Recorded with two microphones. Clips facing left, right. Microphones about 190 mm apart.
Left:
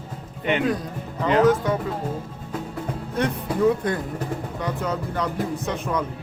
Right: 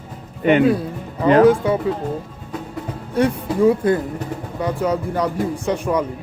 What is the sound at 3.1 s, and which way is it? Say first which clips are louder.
Speech: right 6 dB; 10° right (ahead or behind).